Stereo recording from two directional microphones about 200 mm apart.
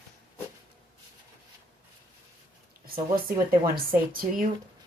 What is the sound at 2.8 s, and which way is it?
Speech, 45° right (ahead or behind).